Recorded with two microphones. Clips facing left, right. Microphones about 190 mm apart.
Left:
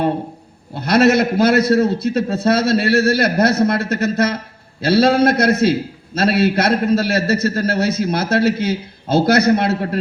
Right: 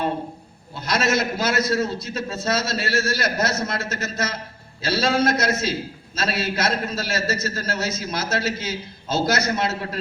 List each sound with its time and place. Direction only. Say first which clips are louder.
0.7 s a man's voice: left 9 dB; 60° left (ahead or behind)